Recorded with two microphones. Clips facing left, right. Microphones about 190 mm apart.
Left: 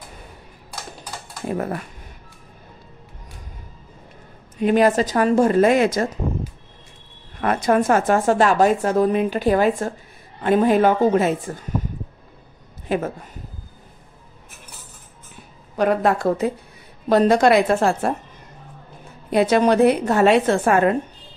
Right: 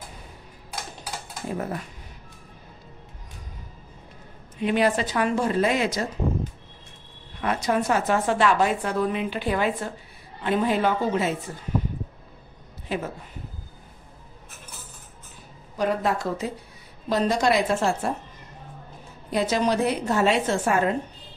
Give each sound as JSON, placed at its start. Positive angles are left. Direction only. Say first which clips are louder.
{"t": 1.5, "sound": "a woman's voice", "louder": "left 5 dB", "side_deg": 60}
{"t": 4.6, "sound": "a woman's voice", "louder": "left 6 dB", "side_deg": 45}
{"t": 7.3, "sound": "a woman's voice", "louder": "left 6 dB", "side_deg": 50}
{"t": 12.8, "sound": "a woman's voice", "louder": "left 6 dB", "side_deg": 50}
{"t": 15.7, "sound": "a woman's voice", "louder": "left 6 dB", "side_deg": 60}
{"t": 19.3, "sound": "a woman's voice", "louder": "left 7 dB", "side_deg": 60}